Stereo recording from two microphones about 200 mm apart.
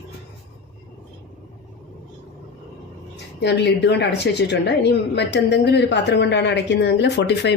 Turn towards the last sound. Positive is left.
turn(degrees=60)  # may be behind; listen again after turning